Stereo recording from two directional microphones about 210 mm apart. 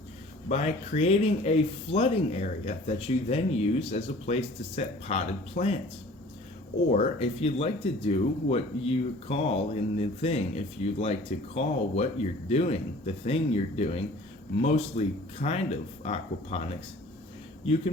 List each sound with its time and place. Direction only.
0.4 s speech: 30° left (ahead or behind)
6.9 s speech: 30° left (ahead or behind)